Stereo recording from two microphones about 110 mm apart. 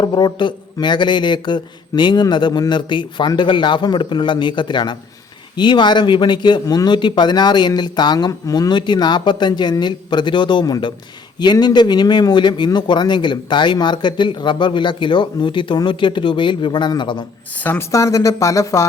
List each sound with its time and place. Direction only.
0.0 s speech: 40° left (ahead or behind)
17.5 s a woman's voice: 15° left (ahead or behind)
17.9 s speech: 30° left (ahead or behind)